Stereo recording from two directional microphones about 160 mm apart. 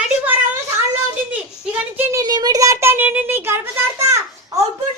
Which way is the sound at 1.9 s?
15° right (ahead or behind).